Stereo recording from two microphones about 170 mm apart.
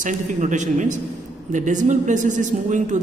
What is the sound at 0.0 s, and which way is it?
A man's voice, 45° right (ahead or behind).